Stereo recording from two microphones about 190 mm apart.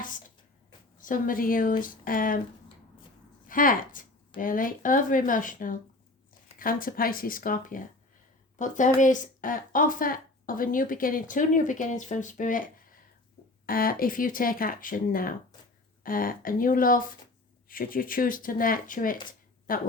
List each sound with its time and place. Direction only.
0.9 s a woman's voice: 45° left (ahead or behind)
3.4 s a woman's voice: 45° left (ahead or behind)